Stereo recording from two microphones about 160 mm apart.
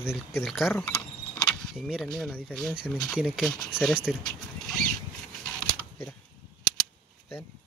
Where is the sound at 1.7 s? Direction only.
Centre (ahead or behind).